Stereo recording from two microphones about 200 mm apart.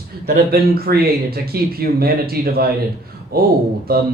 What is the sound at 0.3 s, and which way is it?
Speech, 50° right (ahead or behind).